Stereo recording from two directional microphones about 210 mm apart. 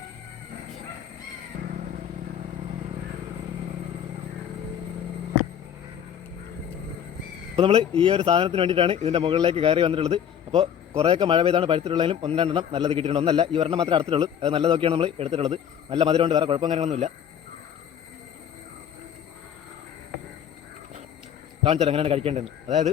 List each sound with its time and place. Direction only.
7.5 s a man's voice: 30° right (ahead or behind)
21.6 s a man's voice: 30° right (ahead or behind)